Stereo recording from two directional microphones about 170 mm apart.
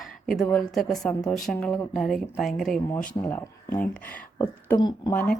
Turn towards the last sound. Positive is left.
turn(degrees=10)  # may be behind; listen again after turning